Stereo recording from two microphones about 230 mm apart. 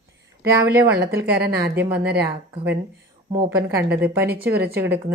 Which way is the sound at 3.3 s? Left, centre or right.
Centre.